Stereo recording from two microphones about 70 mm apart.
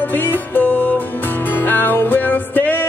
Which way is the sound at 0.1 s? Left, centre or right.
Left.